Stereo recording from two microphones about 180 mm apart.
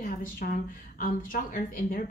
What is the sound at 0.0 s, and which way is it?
A woman's voice, 50° left (ahead or behind).